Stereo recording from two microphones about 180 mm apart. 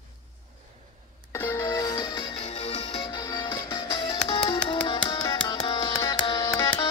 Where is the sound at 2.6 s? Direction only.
40° left (ahead or behind).